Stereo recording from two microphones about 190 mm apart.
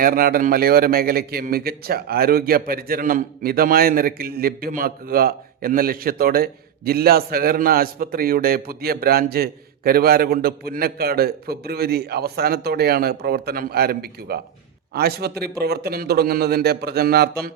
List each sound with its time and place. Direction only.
0.0 s a man's voice: 50° right (ahead or behind)